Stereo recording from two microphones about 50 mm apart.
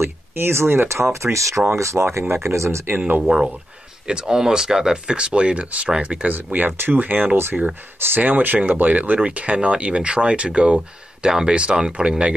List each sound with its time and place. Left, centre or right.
0.0 s speech: right
1.2 s speech: right
3.0 s speech: right; by 4.9 s centre
5.0 s speech: right
6.2 s speech: right
8.2 s speech: right